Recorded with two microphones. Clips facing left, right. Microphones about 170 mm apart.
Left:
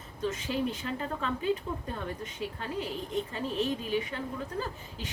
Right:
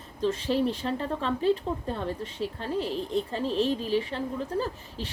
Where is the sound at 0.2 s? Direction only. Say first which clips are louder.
Right 5 dB; 35° right (ahead or behind).